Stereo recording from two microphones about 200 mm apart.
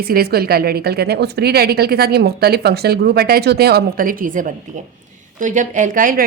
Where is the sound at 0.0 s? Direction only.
50° right (ahead or behind).